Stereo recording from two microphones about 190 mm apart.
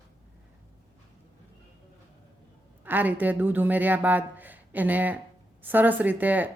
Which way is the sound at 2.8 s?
10° right (ahead or behind).